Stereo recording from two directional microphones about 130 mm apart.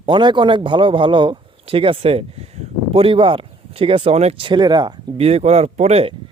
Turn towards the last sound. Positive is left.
turn(degrees=-55)  # may be behind; listen again after turning